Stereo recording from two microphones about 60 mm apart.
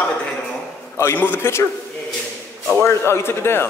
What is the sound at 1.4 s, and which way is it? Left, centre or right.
Speech, left.